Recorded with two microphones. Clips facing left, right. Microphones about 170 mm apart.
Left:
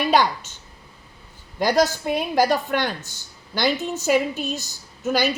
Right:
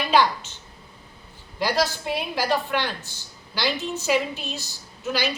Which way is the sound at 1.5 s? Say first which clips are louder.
Left 5 dB; 45° left (ahead or behind).